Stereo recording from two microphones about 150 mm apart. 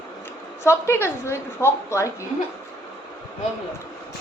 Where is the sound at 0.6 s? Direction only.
15° left (ahead or behind).